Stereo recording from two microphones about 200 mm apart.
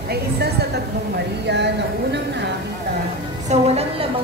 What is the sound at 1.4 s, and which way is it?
Speech, 60° right (ahead or behind).